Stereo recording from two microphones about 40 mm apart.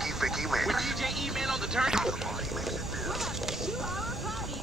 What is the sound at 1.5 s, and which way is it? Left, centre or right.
Speech, centre.